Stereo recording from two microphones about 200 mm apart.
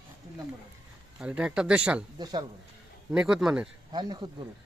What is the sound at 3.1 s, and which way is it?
Speech, 5° right (ahead or behind).